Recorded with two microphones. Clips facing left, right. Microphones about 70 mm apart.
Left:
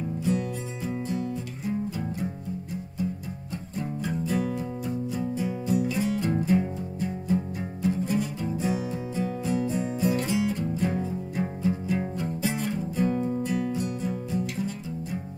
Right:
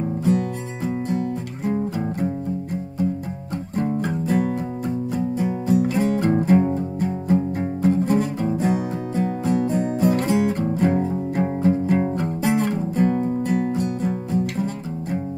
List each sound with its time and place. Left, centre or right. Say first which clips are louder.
0.0 s music: right 6 dB; right
3.7 s music: right 8 dB; right